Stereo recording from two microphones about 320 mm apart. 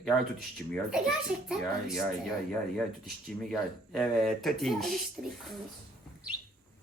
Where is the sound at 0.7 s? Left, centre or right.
Centre.